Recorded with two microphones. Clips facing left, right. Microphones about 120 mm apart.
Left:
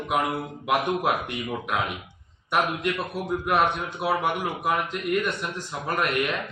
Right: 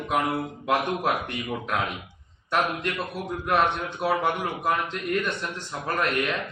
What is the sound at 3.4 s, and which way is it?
A man's voice, 10° left (ahead or behind).